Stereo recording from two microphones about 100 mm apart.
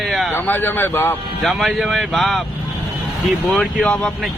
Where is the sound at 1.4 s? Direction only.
Centre (ahead or behind).